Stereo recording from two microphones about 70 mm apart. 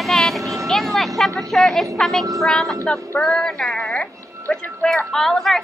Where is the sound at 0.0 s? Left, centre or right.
Centre.